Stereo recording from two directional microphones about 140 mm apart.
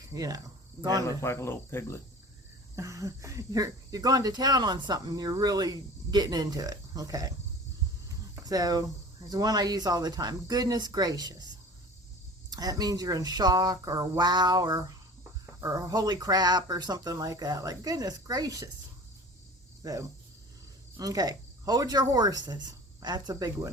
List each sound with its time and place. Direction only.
0.1 s speech: 25° right (ahead or behind)
1.0 s speech: 20° left (ahead or behind)
2.7 s speech: 20° right (ahead or behind)
8.4 s speech: 25° right (ahead or behind)
19.8 s speech: 25° right (ahead or behind)